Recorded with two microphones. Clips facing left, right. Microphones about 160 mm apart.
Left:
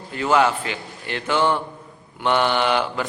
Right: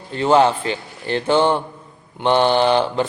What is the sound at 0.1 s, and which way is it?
A man's voice, 30° right (ahead or behind).